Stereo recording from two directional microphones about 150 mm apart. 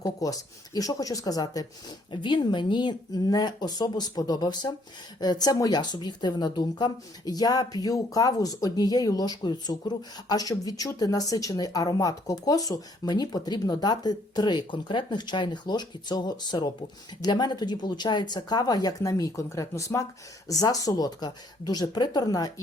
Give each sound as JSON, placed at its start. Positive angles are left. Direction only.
{"t": 0.0, "sound": "speech", "side_deg": 25}